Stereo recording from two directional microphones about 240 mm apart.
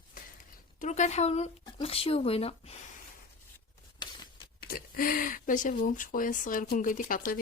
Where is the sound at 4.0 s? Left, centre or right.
Centre.